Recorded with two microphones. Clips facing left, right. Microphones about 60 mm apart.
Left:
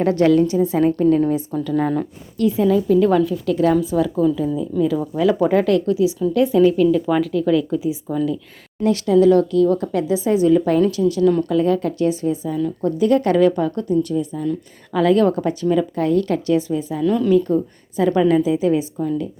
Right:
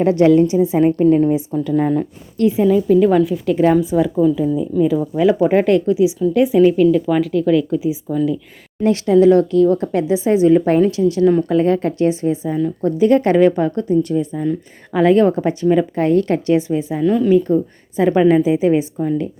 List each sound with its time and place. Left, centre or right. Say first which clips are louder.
0.0 s speech: right 3 dB; right
1.5 s speech: right 3 dB; centre
4.7 s speech: right 3 dB; centre
5.1 s speech: right 2 dB; right
5.8 s speech: right 3 dB; centre
8.8 s speech: right 2 dB; right
15.7 s speech: right 3 dB; right
17.1 s speech: right 2 dB; centre
19.0 s speech: right 3 dB; right